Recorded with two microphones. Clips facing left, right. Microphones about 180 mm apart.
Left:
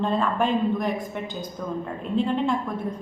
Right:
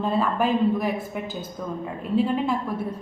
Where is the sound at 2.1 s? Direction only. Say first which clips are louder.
Right 1 dB; 5° right (ahead or behind).